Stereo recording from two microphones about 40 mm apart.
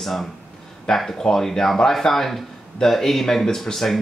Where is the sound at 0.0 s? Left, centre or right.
Centre.